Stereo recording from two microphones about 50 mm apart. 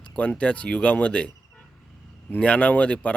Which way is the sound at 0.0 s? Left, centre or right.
Left.